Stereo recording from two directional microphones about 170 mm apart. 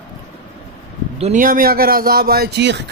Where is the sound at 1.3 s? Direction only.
55° right (ahead or behind); by 2.8 s 80° right.